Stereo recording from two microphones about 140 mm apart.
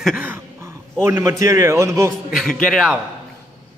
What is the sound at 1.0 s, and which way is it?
A man's voice, 20° right (ahead or behind).